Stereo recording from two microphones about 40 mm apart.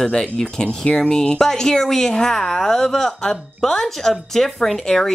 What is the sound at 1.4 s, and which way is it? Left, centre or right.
A woman's voice, centre.